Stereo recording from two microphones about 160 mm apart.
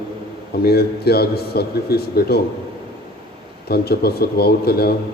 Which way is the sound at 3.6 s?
80° left.